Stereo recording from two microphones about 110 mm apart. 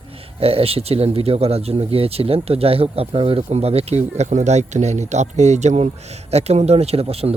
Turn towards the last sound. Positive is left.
turn(degrees=-65)  # may be behind; listen again after turning